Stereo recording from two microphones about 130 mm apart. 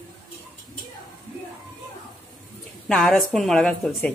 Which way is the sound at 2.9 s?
5° left (ahead or behind).